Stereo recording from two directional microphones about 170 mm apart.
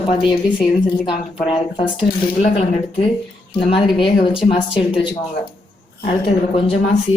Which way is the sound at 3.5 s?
35° left (ahead or behind).